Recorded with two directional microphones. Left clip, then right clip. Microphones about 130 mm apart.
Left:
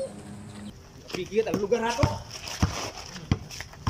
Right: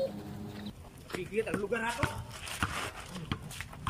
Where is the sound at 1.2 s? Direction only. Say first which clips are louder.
Left 7 dB; 30° left (ahead or behind).